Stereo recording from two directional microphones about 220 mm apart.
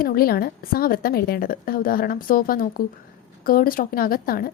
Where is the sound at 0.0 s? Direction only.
45° left (ahead or behind).